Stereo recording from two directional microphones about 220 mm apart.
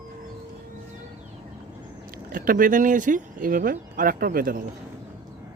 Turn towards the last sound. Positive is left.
turn(degrees=-40)  # may be behind; listen again after turning